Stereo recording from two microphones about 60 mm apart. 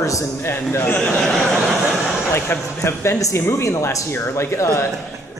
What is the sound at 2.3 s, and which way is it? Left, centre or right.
A man's voice, left.